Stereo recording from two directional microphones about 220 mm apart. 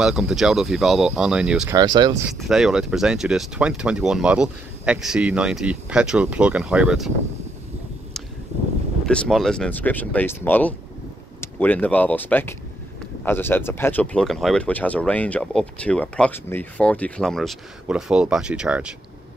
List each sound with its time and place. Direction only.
0.0 s speech: 5° right (ahead or behind)
1.8 s speech: 20° right (ahead or behind)
2.3 s speech: centre (ahead or behind)
9.0 s speech: 5° left (ahead or behind)